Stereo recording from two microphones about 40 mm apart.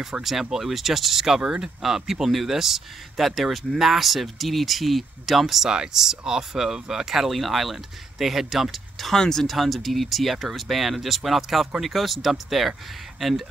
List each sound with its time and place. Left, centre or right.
0.2 s speech: centre
1.4 s speech: right
1.8 s speech: centre
5.7 s speech: centre
9.1 s speech: centre